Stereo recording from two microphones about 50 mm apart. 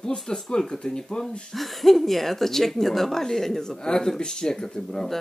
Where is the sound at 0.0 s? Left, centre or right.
Centre.